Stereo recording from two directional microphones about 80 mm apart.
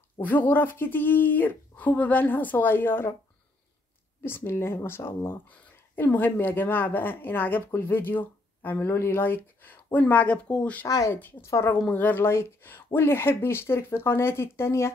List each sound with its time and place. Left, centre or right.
0.2 s speech: left
4.2 s speech: left
11.9 s speech: left